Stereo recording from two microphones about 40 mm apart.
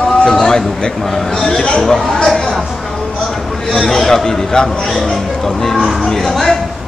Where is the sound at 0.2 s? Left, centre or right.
Centre.